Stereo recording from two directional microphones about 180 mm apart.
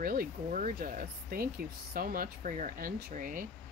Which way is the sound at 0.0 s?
50° right (ahead or behind).